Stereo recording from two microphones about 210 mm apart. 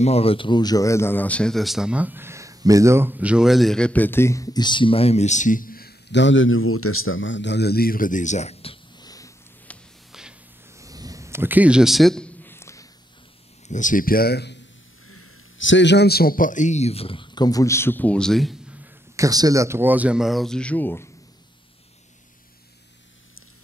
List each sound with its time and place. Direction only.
0.0 s speech: 30° left (ahead or behind)
9.7 s music: centre (ahead or behind)
10.7 s a sound: 15° right (ahead or behind); by 12.8 s 10° left (ahead or behind)
13.7 s speech: 35° left (ahead or behind)
15.0 s a man's voice: 80° left; by 18.8 s centre (ahead or behind)
19.1 s speech: 15° right (ahead or behind); by 21.1 s 10° left (ahead or behind)